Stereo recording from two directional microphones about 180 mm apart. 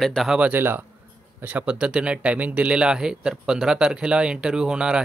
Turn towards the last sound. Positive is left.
turn(degrees=-5)  # may be behind; listen again after turning